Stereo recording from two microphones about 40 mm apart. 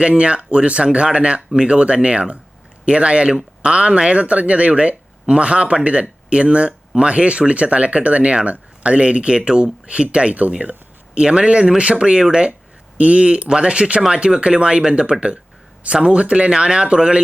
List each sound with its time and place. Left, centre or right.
0.0 s speech: right
11.1 s speech: right